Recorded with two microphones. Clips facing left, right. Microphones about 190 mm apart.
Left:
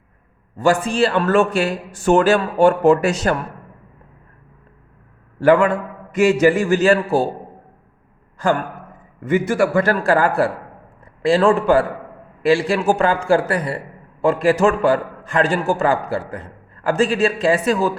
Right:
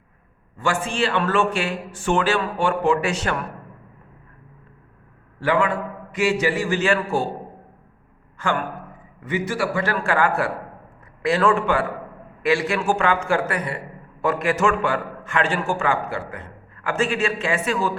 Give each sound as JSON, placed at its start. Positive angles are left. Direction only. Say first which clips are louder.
{"t": 0.5, "sound": "a man's voice", "louder": "left 7 dB", "side_deg": 40}
{"t": 5.4, "sound": "a man's voice", "louder": "left 7 dB", "side_deg": 45}
{"t": 8.4, "sound": "a man's voice", "louder": "left 6 dB", "side_deg": 35}
{"t": 9.2, "sound": "a man's voice", "louder": "left 7 dB", "side_deg": 50}